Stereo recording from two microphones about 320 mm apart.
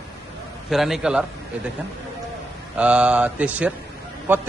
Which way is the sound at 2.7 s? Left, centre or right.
Centre.